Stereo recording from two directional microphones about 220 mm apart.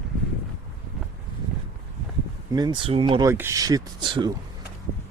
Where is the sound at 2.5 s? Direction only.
20° right (ahead or behind).